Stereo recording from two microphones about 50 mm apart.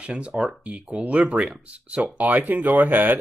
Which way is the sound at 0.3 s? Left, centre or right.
Right.